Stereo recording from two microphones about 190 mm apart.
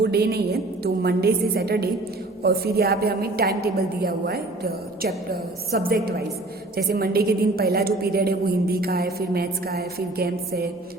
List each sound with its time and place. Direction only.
0.0 s a woman's voice: 55° right (ahead or behind)